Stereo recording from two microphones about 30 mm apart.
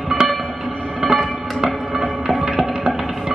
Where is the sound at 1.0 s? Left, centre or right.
Centre.